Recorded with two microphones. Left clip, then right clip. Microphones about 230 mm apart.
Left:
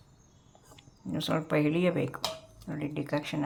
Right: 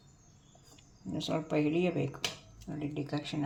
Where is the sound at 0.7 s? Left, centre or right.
Centre.